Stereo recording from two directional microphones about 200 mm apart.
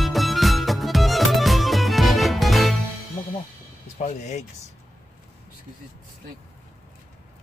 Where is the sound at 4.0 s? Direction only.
35° left (ahead or behind).